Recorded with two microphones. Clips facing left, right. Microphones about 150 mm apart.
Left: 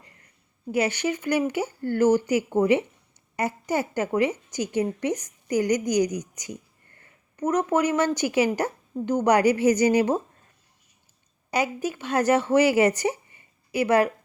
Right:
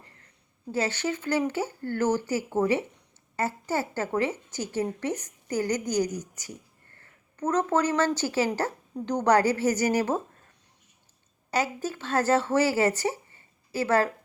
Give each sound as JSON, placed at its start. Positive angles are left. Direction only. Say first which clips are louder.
{"t": 0.7, "sound": "speech", "louder": "left 4 dB", "side_deg": 15}
{"t": 11.5, "sound": "speech", "louder": "left 2 dB", "side_deg": 15}